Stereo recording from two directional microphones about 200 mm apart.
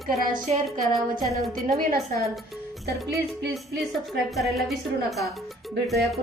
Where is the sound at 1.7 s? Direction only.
50° right (ahead or behind).